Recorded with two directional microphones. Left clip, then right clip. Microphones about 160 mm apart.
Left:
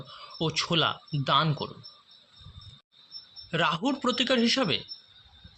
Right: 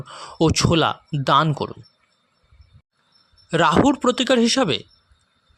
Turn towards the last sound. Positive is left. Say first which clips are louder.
# right 7 dB
turn(degrees=-80)